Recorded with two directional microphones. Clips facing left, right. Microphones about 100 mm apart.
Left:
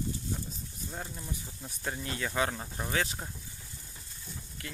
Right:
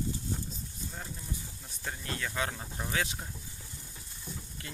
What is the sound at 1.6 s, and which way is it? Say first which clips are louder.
Speech: left 4 dB; 10° left (ahead or behind).